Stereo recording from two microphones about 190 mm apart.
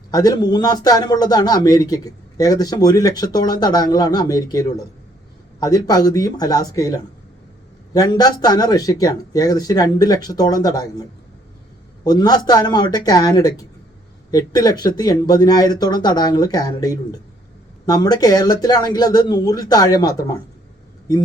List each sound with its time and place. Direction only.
0.1 s speech: 20° left (ahead or behind)
12.0 s speech: 20° left (ahead or behind)